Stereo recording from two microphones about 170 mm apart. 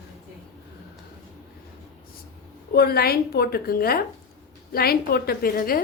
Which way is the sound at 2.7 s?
65° left (ahead or behind).